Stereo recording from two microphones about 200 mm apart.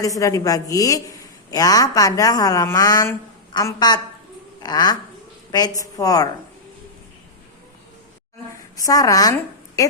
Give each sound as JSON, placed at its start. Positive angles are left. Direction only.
{"t": 0.0, "sound": "a woman's voice", "side_deg": 15}
{"t": 8.7, "sound": "a woman's voice", "side_deg": 15}